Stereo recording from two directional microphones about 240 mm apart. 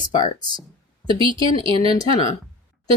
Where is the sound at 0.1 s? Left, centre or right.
Centre.